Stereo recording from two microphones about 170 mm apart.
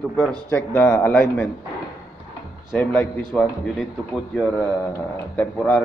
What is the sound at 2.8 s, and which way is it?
A man's voice, 10° left (ahead or behind).